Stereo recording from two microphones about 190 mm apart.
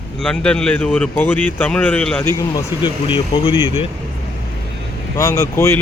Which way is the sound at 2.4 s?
20° left (ahead or behind).